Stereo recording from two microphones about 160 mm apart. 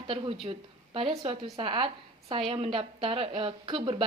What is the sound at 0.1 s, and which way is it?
A woman's voice, 30° right (ahead or behind).